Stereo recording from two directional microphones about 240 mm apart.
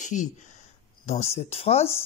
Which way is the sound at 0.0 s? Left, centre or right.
Left.